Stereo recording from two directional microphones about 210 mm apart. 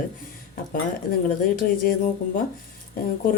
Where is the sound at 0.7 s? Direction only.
45° left (ahead or behind).